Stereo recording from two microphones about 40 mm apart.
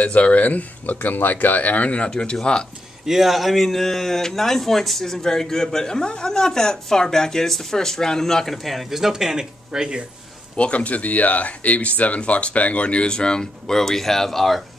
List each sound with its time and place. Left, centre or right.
0.0 s speech: left
2.0 s speech: left
3.1 s speech: centre
8.6 s speech: centre
9.0 s speech: centre
10.5 s speech: left; by 14.6 s centre